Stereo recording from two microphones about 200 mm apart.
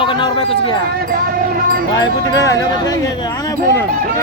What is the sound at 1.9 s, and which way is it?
Speech, 20° left (ahead or behind).